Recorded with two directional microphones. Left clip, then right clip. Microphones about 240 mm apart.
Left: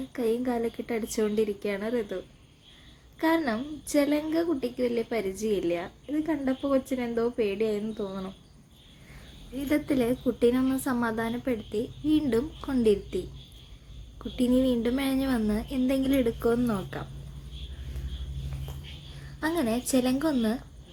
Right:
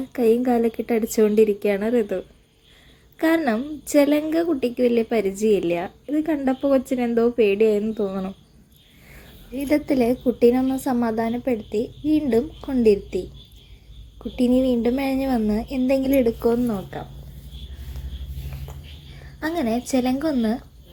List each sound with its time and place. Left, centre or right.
0.1 s a woman's voice: right
9.6 s a woman's voice: centre
14.4 s speech: left
14.8 s a woman's voice: centre
19.4 s a woman's voice: centre